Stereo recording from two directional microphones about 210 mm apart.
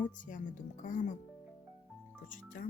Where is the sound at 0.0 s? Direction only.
40° left (ahead or behind).